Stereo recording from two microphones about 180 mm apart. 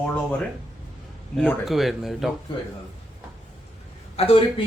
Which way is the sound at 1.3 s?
Centre (ahead or behind).